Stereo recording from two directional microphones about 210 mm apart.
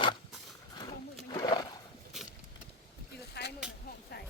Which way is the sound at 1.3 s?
20° left (ahead or behind).